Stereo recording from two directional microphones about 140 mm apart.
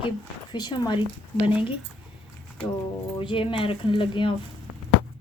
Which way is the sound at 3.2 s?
40° left (ahead or behind).